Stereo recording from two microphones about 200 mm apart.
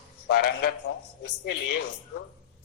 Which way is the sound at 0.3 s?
50° left (ahead or behind).